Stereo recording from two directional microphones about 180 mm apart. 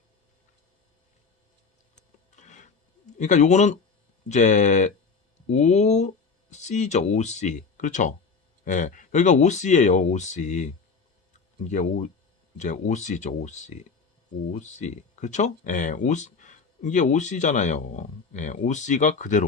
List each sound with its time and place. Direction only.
2.3 s filing: 40° left (ahead or behind)
3.2 s speech: 40° left (ahead or behind)